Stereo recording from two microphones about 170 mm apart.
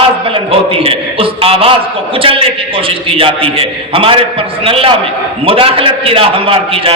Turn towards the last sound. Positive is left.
turn(degrees=-35)  # may be behind; listen again after turning